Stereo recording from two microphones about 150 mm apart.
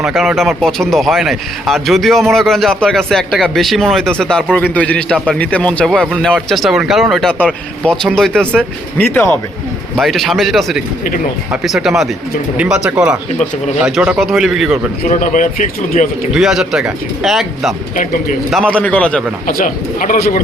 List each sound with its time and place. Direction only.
0.0 s speech: centre (ahead or behind)
10.0 s speech: centre (ahead or behind)
15.0 s a man's voice: 60° left (ahead or behind)
16.3 s a man's voice: 5° right (ahead or behind)
19.5 s a man's voice: 70° left (ahead or behind)